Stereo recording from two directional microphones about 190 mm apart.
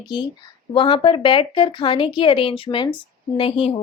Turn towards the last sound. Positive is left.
turn(degrees=30)  # may be behind; listen again after turning